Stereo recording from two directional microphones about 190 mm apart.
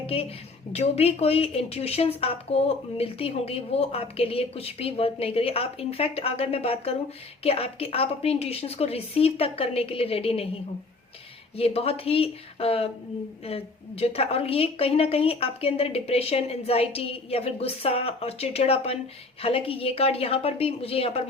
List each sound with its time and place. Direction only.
0.0 s a woman's voice: 30° left (ahead or behind)
11.5 s a woman's voice: 30° left (ahead or behind)